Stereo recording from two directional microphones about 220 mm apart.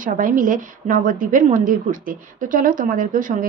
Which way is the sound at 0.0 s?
40° right (ahead or behind).